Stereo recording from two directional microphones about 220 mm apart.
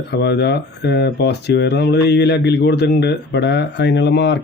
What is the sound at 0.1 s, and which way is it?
Speech, 50° left (ahead or behind).